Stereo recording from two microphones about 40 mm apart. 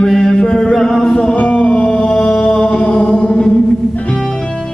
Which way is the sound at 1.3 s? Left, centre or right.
Left.